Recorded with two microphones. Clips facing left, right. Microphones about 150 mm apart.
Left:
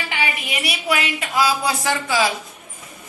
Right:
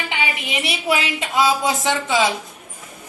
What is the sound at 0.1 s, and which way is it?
A woman's voice, 25° right (ahead or behind).